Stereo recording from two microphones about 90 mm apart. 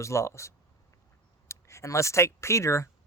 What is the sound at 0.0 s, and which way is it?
Speech, 30° left (ahead or behind).